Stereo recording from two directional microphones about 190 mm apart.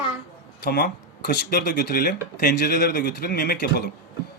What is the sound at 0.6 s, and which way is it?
A man's voice, 55° left (ahead or behind).